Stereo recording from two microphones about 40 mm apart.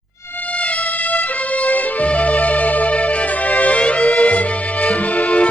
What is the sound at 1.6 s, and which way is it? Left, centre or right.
Music, left.